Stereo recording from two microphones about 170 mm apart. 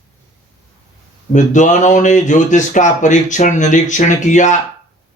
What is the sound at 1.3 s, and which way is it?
Speech, 45° left (ahead or behind).